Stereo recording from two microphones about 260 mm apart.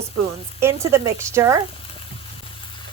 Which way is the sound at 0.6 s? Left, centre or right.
Centre.